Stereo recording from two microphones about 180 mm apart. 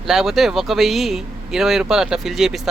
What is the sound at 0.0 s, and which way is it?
Speech, centre (ahead or behind).